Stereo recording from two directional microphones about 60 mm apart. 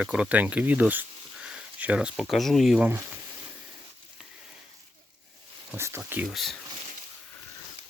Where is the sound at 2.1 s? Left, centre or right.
Centre.